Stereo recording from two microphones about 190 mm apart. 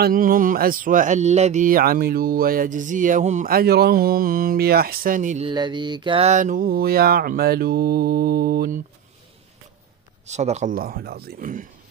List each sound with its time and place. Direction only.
0.0 s speech: 50° right (ahead or behind)
5.5 s speech: 25° right (ahead or behind); by 8.8 s 50° right (ahead or behind)
10.2 s speech: 35° right (ahead or behind)